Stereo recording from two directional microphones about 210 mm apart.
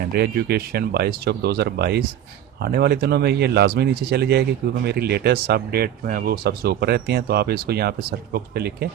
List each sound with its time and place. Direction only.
0.2 s speech: 50° right (ahead or behind)